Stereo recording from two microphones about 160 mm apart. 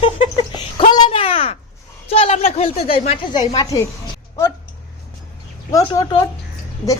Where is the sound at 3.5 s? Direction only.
25° left (ahead or behind).